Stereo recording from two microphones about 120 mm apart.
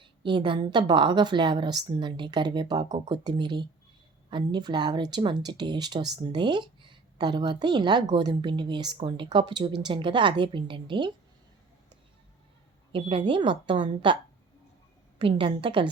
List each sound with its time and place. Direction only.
0.0 s speech: 45° right (ahead or behind)
12.9 s a woman's voice: 50° right (ahead or behind)
15.2 s a woman's voice: 45° right (ahead or behind)